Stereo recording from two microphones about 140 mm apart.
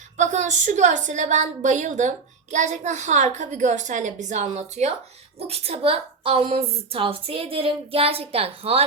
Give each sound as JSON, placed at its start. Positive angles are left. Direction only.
{"t": 0.2, "sound": "a woman's voice", "side_deg": -60}